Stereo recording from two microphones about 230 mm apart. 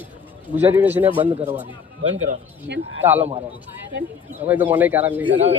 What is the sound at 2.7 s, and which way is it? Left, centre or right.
Speech, right.